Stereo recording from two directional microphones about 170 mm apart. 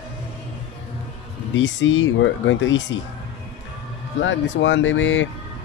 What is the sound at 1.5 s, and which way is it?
Speech, 90° left.